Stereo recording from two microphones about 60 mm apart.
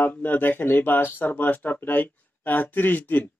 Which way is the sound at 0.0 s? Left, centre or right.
Left.